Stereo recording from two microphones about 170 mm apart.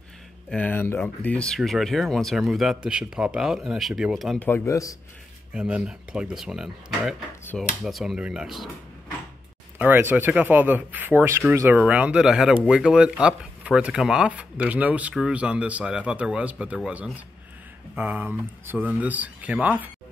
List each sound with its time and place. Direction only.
0.5 s speech: 10° left (ahead or behind)
4.5 s a man's voice: 15° left (ahead or behind)
5.5 s speech: 5° right (ahead or behind)
9.8 s speech: 10° right (ahead or behind)